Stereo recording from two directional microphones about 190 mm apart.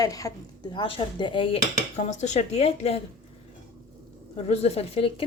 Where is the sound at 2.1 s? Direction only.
40° left (ahead or behind).